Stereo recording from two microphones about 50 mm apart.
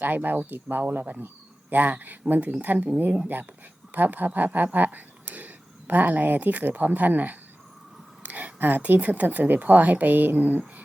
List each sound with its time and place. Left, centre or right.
0.0 s speech: right
3.9 s speech: right
8.2 s a sound: right
9.0 s speech: right